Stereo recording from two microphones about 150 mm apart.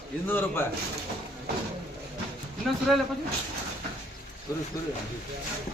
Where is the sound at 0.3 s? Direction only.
15° left (ahead or behind).